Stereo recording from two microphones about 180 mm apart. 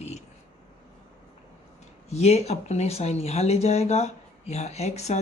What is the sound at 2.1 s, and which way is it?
Speech, 35° left (ahead or behind).